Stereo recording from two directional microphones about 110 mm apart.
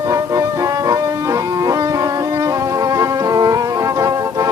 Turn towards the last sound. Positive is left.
turn(degrees=-30)  # may be behind; listen again after turning